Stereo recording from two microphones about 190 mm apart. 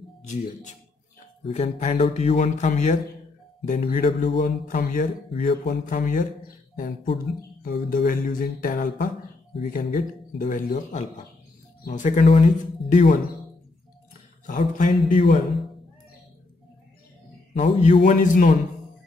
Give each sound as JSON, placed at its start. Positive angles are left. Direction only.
{"t": 1.4, "sound": "speech", "side_deg": 35}
{"t": 3.6, "sound": "music", "side_deg": 40}
{"t": 7.6, "sound": "music", "side_deg": 45}
{"t": 9.7, "sound": "speech", "side_deg": 45}
{"t": 14.4, "sound": "music", "side_deg": 45}
{"t": 17.6, "sound": "speech", "side_deg": 35}